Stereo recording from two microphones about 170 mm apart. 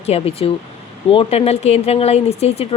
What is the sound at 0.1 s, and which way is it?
Speech, 35° left (ahead or behind).